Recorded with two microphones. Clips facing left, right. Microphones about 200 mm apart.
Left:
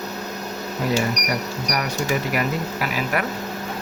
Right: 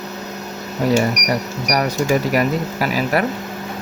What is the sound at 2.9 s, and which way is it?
Speech, 35° right (ahead or behind).